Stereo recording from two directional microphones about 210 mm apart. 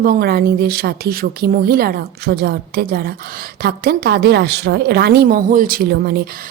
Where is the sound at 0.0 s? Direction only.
45° right (ahead or behind).